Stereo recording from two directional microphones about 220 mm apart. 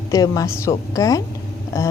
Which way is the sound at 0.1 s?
15° left (ahead or behind).